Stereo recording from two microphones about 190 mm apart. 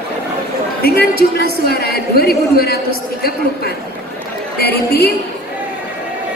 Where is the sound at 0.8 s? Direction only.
55° left (ahead or behind).